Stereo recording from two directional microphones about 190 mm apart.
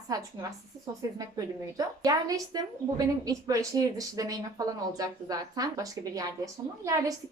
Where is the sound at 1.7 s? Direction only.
20° right (ahead or behind).